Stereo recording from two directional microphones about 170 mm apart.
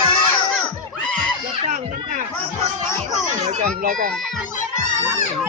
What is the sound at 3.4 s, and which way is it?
Speech, 45° right (ahead or behind).